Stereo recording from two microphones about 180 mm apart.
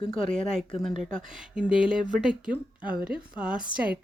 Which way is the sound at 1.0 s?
45° right (ahead or behind).